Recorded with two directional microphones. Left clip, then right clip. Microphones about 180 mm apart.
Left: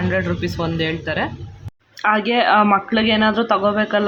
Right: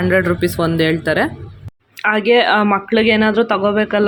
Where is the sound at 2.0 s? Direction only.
15° right (ahead or behind).